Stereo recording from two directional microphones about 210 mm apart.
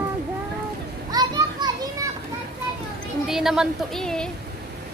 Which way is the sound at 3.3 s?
Centre (ahead or behind).